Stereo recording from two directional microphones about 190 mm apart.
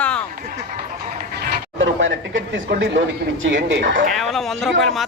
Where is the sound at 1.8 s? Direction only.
90° right.